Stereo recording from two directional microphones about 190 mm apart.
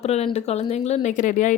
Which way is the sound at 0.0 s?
35° left (ahead or behind).